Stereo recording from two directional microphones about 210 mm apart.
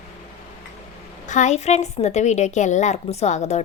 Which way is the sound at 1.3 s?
35° left (ahead or behind).